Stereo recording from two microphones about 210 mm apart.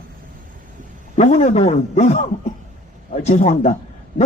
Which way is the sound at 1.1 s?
35° left (ahead or behind).